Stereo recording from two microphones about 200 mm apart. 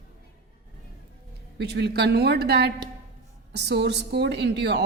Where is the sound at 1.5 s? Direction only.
55° right (ahead or behind).